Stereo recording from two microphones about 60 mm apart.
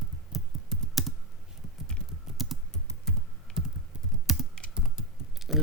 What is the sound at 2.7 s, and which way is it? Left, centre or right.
Computer keyboard, centre.